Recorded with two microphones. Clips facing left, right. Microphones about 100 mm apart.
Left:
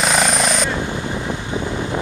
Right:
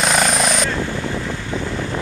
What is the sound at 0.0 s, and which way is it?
Vehicle, centre (ahead or behind).